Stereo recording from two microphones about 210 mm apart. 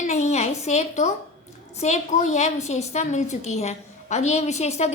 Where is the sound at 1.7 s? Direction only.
35° left (ahead or behind).